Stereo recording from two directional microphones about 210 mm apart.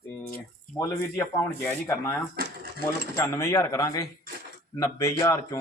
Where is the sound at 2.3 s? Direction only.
45° right (ahead or behind).